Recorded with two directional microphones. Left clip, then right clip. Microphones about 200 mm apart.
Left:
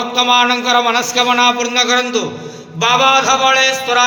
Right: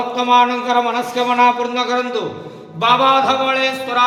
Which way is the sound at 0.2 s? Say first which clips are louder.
Left 2 dB; 10° left (ahead or behind).